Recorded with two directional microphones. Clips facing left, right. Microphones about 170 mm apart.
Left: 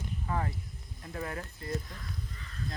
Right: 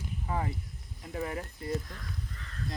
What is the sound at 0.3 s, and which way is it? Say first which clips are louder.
Speech: right 1 dB; 15° right (ahead or behind).